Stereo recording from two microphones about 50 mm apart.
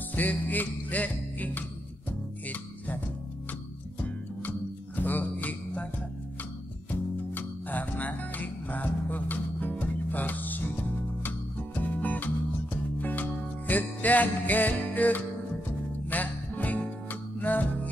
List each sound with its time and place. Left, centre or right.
0.1 s music: left
4.4 s music: left
6.9 s music: left